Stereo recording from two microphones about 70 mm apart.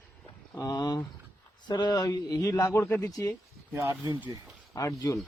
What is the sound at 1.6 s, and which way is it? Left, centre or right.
Speech, left.